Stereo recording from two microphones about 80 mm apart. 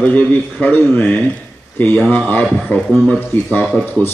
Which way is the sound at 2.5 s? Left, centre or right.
Centre.